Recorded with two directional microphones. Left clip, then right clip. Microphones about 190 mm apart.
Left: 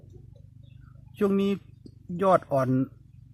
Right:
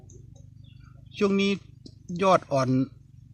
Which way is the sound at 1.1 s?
5° right (ahead or behind).